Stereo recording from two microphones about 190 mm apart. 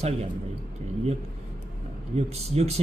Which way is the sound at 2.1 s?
35° right (ahead or behind).